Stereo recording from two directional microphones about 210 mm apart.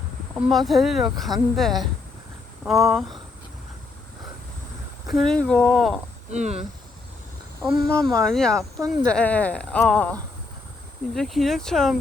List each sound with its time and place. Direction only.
0.3 s speech: centre (ahead or behind)
5.0 s speech: centre (ahead or behind)
6.3 s speech: 35° right (ahead or behind)
7.6 s speech: centre (ahead or behind)